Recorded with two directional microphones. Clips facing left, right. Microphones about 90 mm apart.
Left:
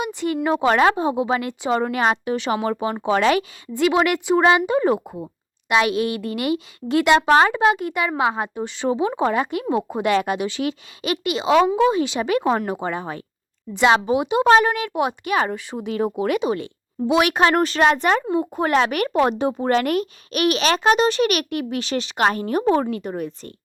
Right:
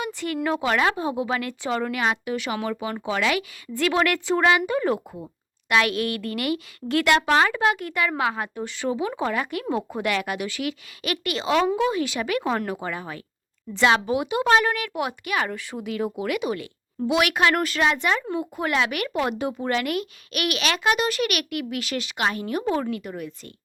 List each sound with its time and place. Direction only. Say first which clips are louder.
0.0 s a sound: left 5 dB; 20° left (ahead or behind)
0.4 s speech: left 5 dB; 30° left (ahead or behind)
3.8 s speech: left 4 dB; 20° left (ahead or behind)
14.4 s speech: left 5 dB; 35° left (ahead or behind)
22.2 s speech: left 6 dB; 40° left (ahead or behind)